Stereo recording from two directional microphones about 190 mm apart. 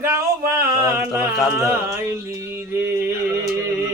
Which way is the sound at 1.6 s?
15° right (ahead or behind).